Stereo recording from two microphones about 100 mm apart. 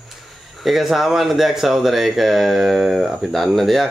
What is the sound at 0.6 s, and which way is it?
Speech, centre (ahead or behind).